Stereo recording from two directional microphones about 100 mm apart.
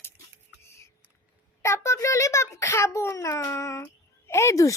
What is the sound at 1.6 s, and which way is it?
A child's voice, 30° left (ahead or behind).